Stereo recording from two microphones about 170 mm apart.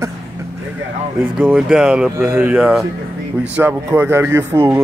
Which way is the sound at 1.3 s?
5° right (ahead or behind).